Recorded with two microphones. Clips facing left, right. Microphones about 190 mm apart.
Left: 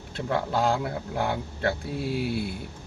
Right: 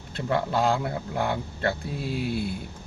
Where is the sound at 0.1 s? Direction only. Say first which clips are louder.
Right 1 dB; centre (ahead or behind).